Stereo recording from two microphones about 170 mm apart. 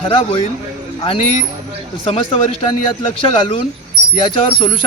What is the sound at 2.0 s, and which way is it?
Speech, 35° left (ahead or behind).